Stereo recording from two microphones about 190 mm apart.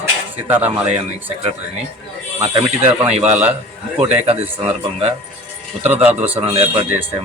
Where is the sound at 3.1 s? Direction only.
35° right (ahead or behind).